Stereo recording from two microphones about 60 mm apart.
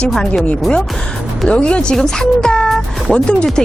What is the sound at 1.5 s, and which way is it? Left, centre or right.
A woman's voice, centre.